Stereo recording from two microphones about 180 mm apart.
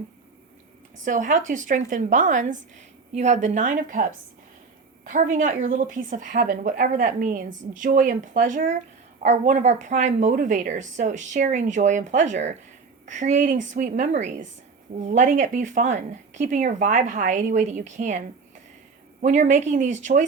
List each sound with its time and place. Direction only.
1.0 s a woman's voice: 45° right (ahead or behind)
19.2 s speech: 40° right (ahead or behind)